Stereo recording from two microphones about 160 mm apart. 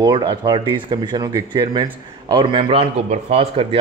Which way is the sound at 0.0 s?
25° right (ahead or behind).